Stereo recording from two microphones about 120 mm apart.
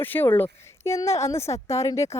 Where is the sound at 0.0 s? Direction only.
15° left (ahead or behind).